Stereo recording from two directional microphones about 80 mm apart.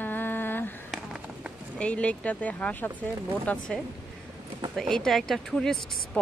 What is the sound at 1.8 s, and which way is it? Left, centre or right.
Speech, centre.